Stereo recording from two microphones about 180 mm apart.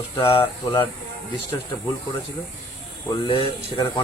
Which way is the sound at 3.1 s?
25° left (ahead or behind).